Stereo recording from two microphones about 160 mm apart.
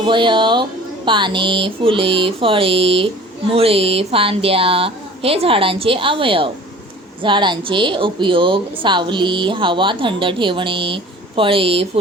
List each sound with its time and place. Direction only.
0.0 s a woman's voice: 30° right (ahead or behind)